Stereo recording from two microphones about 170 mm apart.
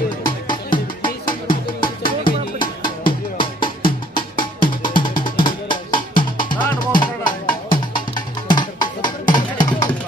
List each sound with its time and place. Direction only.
0.2 s music: 25° left (ahead or behind)